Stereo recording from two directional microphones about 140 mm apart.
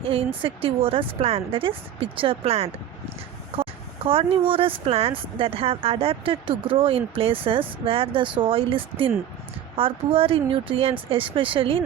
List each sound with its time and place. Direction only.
0.0 s speech: 40° right (ahead or behind)